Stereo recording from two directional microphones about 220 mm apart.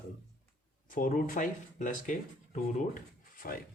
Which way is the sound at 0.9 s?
40° left (ahead or behind).